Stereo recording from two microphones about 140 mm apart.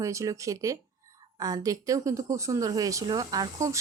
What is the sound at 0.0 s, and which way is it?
A woman's voice, 20° right (ahead or behind).